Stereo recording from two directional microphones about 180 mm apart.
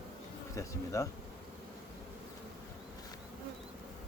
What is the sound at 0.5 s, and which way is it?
Speech, 15° left (ahead or behind).